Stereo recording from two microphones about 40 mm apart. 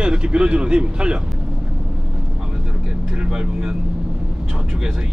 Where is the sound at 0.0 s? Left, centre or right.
Right.